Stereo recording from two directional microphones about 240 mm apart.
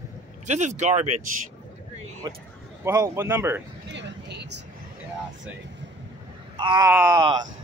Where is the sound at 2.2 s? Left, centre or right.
Centre.